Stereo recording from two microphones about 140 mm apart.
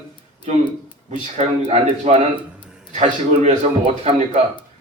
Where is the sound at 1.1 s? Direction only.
55° right (ahead or behind).